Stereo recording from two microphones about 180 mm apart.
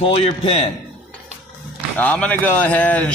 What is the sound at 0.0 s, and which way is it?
Speech, 35° left (ahead or behind).